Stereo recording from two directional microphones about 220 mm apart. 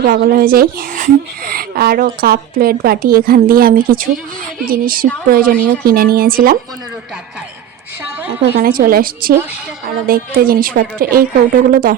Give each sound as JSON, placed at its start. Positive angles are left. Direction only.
{"t": 0.0, "sound": "a woman's voice", "side_deg": -45}
{"t": 8.4, "sound": "a woman's voice", "side_deg": -45}